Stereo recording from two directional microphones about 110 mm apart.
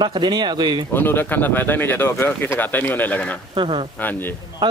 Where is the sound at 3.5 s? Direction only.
50° right (ahead or behind).